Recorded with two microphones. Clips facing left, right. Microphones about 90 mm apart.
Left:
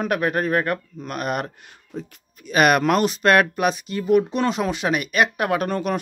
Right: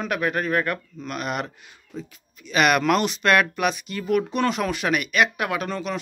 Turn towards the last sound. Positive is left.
turn(degrees=50)  # may be behind; listen again after turning